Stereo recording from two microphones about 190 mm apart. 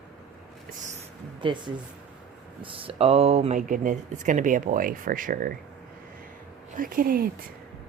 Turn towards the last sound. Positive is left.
turn(degrees=-50)  # may be behind; listen again after turning